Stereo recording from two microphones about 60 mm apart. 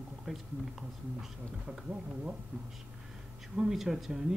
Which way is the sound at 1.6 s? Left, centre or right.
Centre.